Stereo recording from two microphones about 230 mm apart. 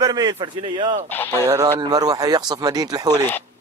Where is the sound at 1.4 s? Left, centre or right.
Centre.